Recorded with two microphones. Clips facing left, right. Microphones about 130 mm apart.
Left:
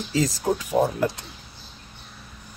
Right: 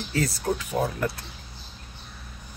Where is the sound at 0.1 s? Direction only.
15° left (ahead or behind).